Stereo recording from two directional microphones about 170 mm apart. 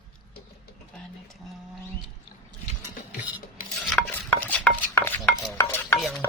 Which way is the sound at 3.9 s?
5° left (ahead or behind).